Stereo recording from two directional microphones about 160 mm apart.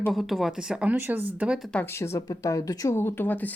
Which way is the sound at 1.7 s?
10° left (ahead or behind).